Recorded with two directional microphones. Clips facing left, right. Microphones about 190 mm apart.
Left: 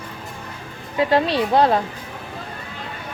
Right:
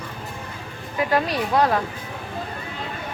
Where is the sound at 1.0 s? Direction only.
25° left (ahead or behind).